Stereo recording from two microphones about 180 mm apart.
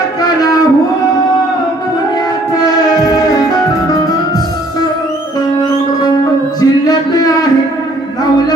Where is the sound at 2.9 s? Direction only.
20° left (ahead or behind).